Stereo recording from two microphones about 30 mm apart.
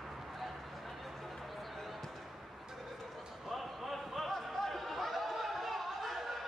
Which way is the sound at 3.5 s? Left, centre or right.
Centre.